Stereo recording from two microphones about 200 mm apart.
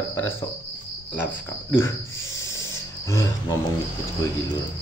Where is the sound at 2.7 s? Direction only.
15° left (ahead or behind).